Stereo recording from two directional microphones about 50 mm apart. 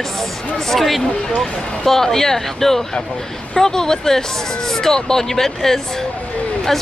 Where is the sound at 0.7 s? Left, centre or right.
Centre.